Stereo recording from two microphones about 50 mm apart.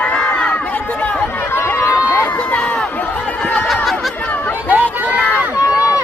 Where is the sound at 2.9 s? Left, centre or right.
Left.